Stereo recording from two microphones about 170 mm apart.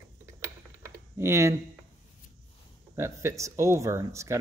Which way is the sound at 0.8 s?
15° right (ahead or behind).